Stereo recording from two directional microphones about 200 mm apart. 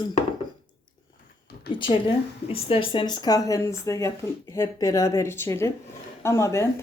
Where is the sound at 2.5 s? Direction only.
30° left (ahead or behind).